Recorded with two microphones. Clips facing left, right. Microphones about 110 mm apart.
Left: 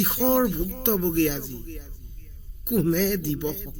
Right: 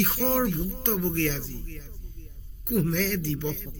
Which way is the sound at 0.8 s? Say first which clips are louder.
Left 5 dB; 25° left (ahead or behind).